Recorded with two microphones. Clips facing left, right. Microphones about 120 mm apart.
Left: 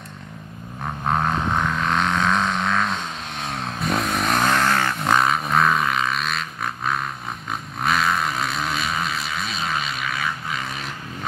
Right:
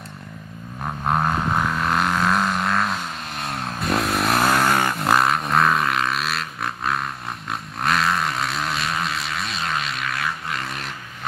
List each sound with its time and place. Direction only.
1.0 s vehicle: 5° right (ahead or behind)